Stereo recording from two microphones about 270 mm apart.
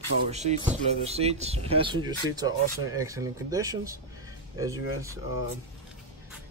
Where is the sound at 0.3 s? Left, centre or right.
Right.